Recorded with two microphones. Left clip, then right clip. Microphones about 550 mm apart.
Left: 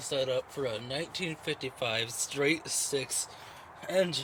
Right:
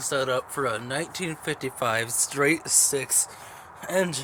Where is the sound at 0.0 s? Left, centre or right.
Left.